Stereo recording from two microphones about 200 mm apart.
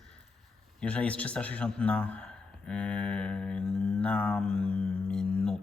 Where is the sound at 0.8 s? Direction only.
5° left (ahead or behind).